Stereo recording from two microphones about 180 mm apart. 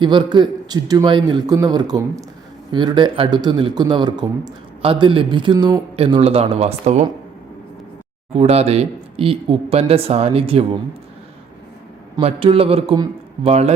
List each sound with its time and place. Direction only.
0.0 s speech: 25° right (ahead or behind)
8.3 s speech: 35° right (ahead or behind)
12.2 s speech: 30° right (ahead or behind)